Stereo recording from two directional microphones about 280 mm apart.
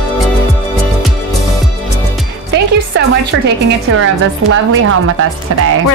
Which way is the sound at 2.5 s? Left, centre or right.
Right.